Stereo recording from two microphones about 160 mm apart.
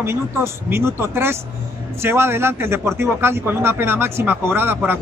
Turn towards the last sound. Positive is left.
turn(degrees=-15)  # may be behind; listen again after turning